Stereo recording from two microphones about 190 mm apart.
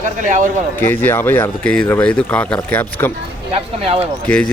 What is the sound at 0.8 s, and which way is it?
Speech, 10° left (ahead or behind).